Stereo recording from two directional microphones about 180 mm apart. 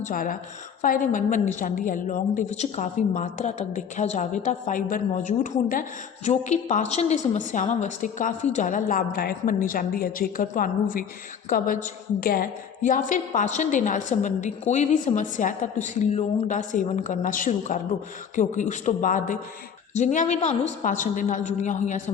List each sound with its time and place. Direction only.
0.0 s a woman's voice: 50° left (ahead or behind)